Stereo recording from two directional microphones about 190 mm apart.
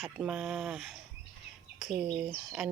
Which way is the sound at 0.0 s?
5° right (ahead or behind).